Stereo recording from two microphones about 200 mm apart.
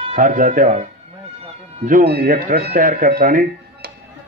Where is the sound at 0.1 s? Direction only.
40° right (ahead or behind).